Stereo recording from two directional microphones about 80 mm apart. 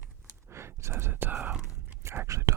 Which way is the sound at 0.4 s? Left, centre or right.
Right.